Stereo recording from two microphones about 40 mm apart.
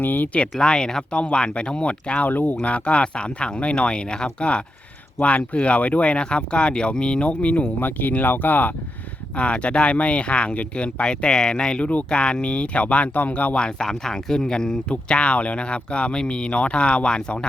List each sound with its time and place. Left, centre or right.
0.0 s speech: left
0.6 s speech: centre
1.1 s speech: left
2.3 s speech: left
2.6 s speech: left
7.8 s speech: left
9.4 s speech: left
11.0 s speech: left
11.8 s speech: left
12.1 s speech: left
13.7 s speech: centre